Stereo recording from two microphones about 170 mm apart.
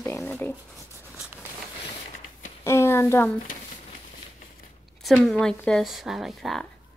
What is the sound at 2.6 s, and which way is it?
Speech, 15° left (ahead or behind).